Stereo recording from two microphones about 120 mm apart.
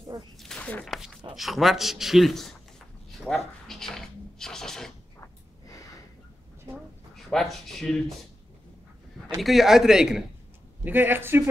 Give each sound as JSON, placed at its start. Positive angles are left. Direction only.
{"t": 0.4, "sound": "a sound", "side_deg": 10}
{"t": 0.8, "sound": "a man's voice", "side_deg": 0}
{"t": 3.2, "sound": "a sound", "side_deg": 0}
{"t": 5.2, "sound": "snort", "side_deg": 30}
{"t": 7.2, "sound": "speech", "side_deg": 5}
{"t": 9.4, "sound": "a man's voice", "side_deg": 0}
{"t": 10.8, "sound": "speech", "side_deg": -15}